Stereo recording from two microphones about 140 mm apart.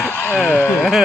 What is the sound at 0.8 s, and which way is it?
Speech, centre (ahead or behind).